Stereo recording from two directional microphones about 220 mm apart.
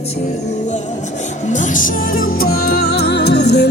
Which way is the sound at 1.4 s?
35° left (ahead or behind).